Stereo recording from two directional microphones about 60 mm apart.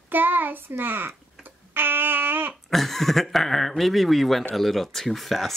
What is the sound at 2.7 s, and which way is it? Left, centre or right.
Speech, centre.